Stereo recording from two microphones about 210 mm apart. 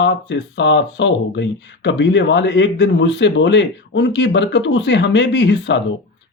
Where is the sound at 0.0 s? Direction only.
55° left (ahead or behind).